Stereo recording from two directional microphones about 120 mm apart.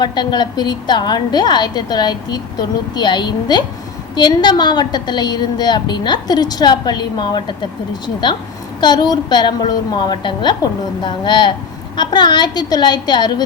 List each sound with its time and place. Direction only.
0.0 s a woman's voice: 35° left (ahead or behind)